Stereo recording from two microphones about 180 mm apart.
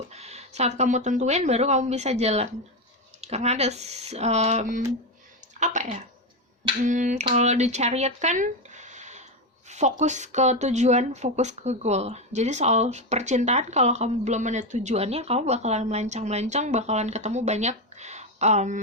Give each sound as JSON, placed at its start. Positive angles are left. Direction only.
{"t": 0.1, "sound": "speech", "side_deg": -35}
{"t": 6.8, "sound": "finger snapping", "side_deg": -45}
{"t": 7.3, "sound": "speech", "side_deg": -40}
{"t": 9.6, "sound": "a sound", "side_deg": -40}
{"t": 10.0, "sound": "speech", "side_deg": -40}